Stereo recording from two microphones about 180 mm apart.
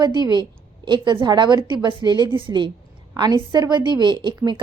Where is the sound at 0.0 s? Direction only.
25° right (ahead or behind).